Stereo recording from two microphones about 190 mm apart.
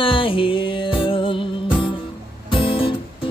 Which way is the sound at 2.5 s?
25° left (ahead or behind).